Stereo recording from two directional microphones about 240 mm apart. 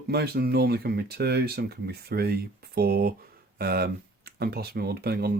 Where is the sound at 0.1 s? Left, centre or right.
Right.